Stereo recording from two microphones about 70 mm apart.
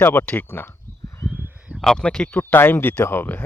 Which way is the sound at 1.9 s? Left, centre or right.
Centre.